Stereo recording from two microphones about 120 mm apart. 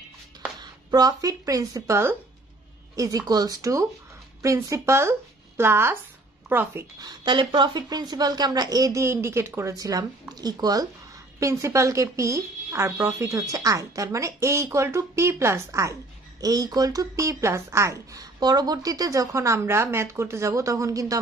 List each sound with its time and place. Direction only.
0.6 s speech: 35° right (ahead or behind); by 6.9 s 20° right (ahead or behind)
7.0 s speech: 40° right (ahead or behind)